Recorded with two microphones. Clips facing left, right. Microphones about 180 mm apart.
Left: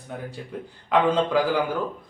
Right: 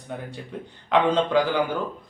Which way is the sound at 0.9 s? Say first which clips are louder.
Even; 5° left (ahead or behind).